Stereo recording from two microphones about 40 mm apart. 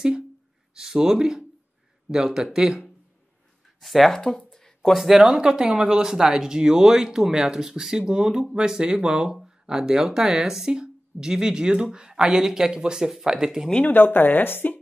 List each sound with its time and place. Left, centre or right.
0.7 s speech: centre
3.8 s speech: centre
4.1 s speech: centre
4.5 s a sound: centre
4.9 s speech: centre
5.2 s speech: centre
13.8 s a woman's voice: left